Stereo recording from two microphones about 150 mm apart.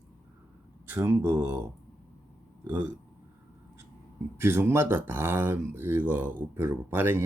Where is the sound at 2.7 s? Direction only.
15° right (ahead or behind).